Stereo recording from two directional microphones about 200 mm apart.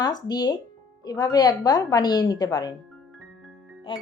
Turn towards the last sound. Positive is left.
turn(degrees=25)  # may be behind; listen again after turning